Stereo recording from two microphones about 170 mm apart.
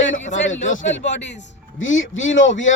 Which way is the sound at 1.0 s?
90° left.